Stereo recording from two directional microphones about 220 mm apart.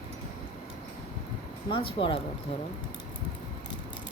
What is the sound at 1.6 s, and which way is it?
Speech, 25° left (ahead or behind).